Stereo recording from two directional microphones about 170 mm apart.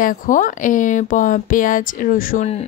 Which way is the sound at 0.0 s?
50° left (ahead or behind).